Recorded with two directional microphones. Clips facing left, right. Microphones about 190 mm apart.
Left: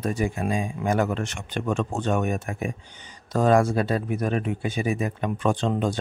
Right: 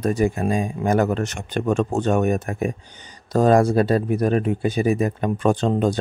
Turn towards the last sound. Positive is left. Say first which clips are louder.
# right 5 dB
turn(degrees=-40)  # may be behind; listen again after turning